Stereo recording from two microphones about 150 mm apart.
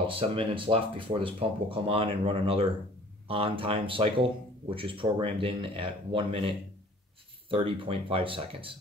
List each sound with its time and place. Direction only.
0.0 s speech: 35° right (ahead or behind)